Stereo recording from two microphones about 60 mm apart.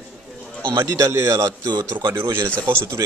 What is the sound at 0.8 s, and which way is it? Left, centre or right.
A man's voice, right.